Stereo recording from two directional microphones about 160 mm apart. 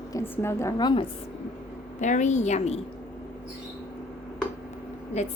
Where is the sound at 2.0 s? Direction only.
50° left (ahead or behind).